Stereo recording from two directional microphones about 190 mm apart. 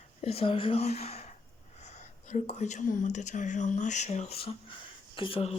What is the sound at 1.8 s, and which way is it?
Speech, 35° left (ahead or behind).